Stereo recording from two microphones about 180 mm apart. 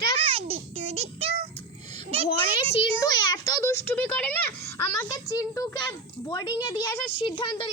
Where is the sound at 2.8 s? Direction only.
25° left (ahead or behind).